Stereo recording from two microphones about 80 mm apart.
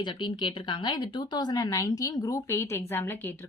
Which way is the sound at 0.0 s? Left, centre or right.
Left.